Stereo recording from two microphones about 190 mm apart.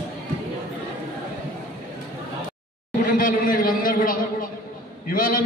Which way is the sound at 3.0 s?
45° left (ahead or behind).